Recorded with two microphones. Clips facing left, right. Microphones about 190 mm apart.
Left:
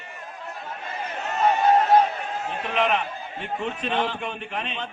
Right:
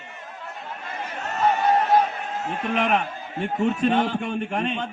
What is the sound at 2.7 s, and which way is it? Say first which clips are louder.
A man's voice: even; 45° right (ahead or behind).